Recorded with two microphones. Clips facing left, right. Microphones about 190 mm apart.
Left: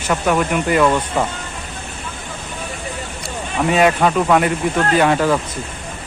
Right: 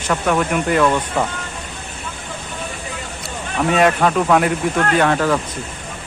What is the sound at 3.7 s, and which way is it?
Speech, 5° left (ahead or behind).